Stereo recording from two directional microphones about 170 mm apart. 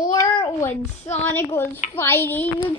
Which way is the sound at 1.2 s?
10° left (ahead or behind).